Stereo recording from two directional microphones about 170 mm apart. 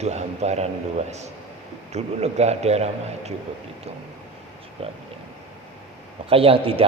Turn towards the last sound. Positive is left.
turn(degrees=-35)  # may be behind; listen again after turning